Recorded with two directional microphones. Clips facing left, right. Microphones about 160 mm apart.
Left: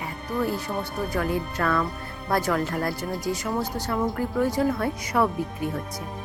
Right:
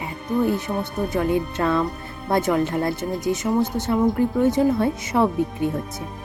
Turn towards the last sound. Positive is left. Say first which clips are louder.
# right 4 dB
turn(degrees=-25)  # may be behind; listen again after turning